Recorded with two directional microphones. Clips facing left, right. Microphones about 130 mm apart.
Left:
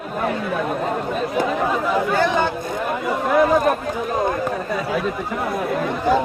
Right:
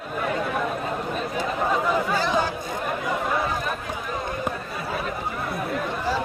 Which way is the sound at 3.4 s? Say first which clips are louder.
Left 11 dB; 75° left (ahead or behind).